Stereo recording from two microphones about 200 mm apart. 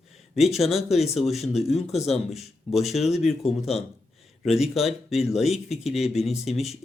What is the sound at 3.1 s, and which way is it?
Speech, 30° left (ahead or behind).